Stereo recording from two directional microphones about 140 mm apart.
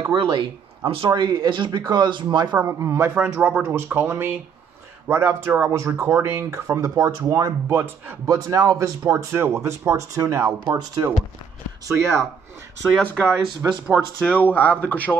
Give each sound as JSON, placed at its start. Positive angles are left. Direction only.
{"t": 0.1, "sound": "speech", "side_deg": -35}
{"t": 2.6, "sound": "speech", "side_deg": -20}
{"t": 13.0, "sound": "speech", "side_deg": 5}